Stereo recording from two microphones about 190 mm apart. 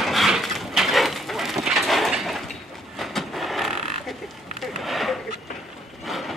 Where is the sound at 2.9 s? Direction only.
Centre (ahead or behind).